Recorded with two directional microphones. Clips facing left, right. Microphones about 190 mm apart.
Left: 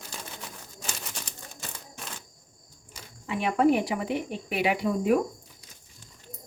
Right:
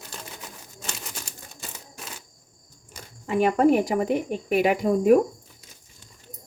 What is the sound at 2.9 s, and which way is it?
Speech, 45° right (ahead or behind).